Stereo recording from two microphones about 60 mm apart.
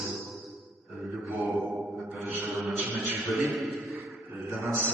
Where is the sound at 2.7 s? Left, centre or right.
Right.